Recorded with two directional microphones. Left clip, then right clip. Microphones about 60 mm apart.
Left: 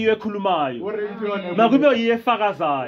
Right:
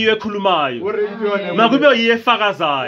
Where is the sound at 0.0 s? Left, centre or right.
Left.